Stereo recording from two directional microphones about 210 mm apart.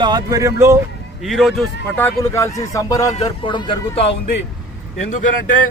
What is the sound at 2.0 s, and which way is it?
Speech, 10° left (ahead or behind).